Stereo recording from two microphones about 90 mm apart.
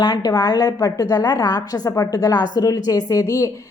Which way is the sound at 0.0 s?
50° left (ahead or behind).